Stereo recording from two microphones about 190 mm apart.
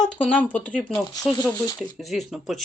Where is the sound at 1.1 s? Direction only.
20° left (ahead or behind).